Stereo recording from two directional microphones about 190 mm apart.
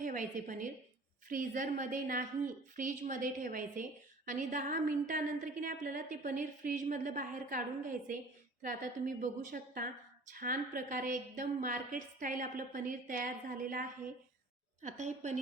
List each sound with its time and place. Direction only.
0.0 s a woman's voice: 45° right (ahead or behind)